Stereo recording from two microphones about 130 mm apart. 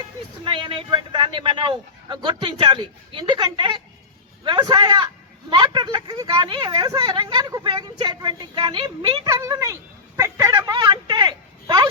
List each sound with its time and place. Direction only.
0.4 s a man's voice: 40° right (ahead or behind)
9.2 s speech: 25° right (ahead or behind)